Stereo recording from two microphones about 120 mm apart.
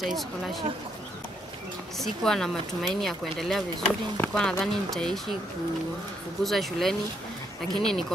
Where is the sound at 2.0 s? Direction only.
5° left (ahead or behind).